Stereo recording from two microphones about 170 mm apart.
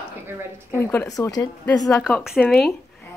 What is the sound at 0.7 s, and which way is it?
A woman's voice, 15° left (ahead or behind).